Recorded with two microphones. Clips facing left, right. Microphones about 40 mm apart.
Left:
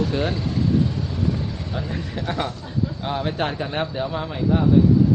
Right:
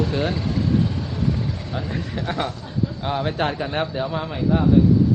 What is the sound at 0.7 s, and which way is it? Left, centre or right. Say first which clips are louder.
Vehicle: left 1 dB; right.